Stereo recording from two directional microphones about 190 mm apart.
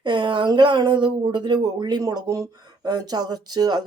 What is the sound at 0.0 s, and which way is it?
A woman's voice, 25° right (ahead or behind).